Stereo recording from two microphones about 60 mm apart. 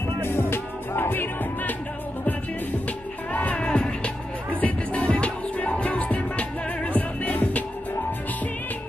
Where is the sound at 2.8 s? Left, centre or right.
Left.